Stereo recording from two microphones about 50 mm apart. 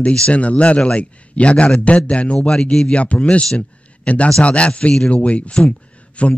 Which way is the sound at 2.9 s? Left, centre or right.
Left.